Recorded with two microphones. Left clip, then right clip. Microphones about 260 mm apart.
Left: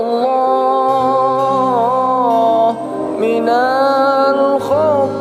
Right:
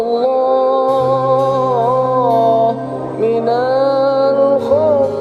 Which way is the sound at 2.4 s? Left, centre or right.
Left.